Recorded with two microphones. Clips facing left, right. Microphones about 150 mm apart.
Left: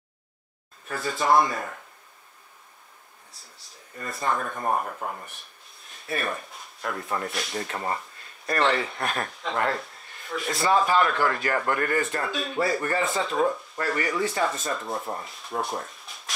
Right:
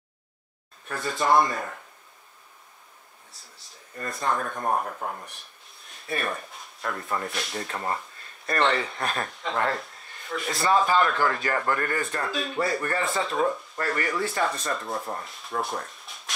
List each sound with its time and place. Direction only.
0.8 s speech: centre (ahead or behind)
4.0 s speech: centre (ahead or behind)